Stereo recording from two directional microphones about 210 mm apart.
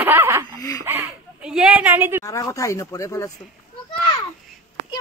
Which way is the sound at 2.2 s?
15° left (ahead or behind).